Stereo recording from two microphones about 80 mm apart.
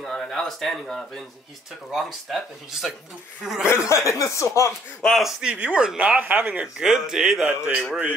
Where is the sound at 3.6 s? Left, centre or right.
Left.